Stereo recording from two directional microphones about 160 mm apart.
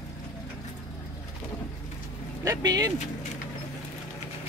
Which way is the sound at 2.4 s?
20° right (ahead or behind).